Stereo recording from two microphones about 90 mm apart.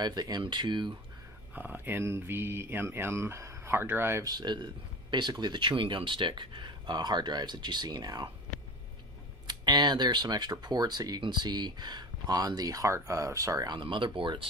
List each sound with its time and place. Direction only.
0.0 s speech: 50° right (ahead or behind)
1.5 s speech: 20° right (ahead or behind)
4.2 s speech: 50° right (ahead or behind)
9.5 s speech: 55° right (ahead or behind)
13.7 s speech: 65° right (ahead or behind)